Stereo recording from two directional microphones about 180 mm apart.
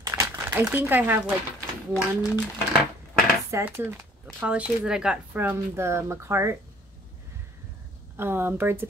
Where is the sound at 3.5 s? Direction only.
10° right (ahead or behind).